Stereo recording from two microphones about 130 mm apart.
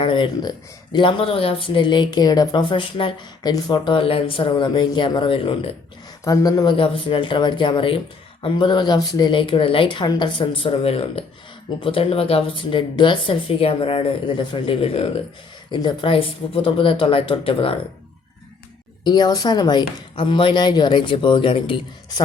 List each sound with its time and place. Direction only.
0.0 s speech: 40° left (ahead or behind)
6.2 s speech: 25° left (ahead or behind); by 15.1 s 50° left (ahead or behind)
15.7 s speech: 35° left (ahead or behind)
19.0 s speech: 35° left (ahead or behind)